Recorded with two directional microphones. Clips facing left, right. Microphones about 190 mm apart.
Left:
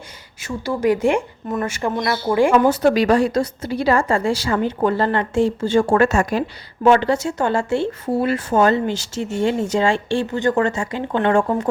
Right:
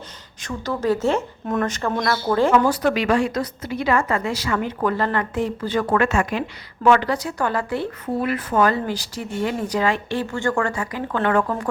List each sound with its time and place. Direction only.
0.4 s speech: 10° left (ahead or behind)
2.6 s a woman's voice: 35° left (ahead or behind)
6.8 s speech: 25° left (ahead or behind)